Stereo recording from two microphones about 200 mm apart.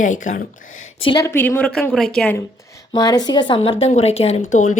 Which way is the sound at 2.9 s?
20° left (ahead or behind).